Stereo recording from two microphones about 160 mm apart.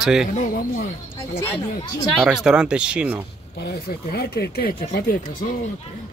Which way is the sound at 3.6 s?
90° left.